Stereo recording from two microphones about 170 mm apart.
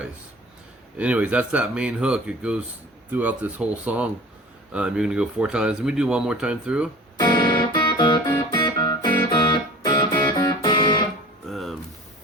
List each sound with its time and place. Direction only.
0.9 s speech: 10° right (ahead or behind)
7.2 s music: 25° left (ahead or behind)
11.4 s music: centre (ahead or behind)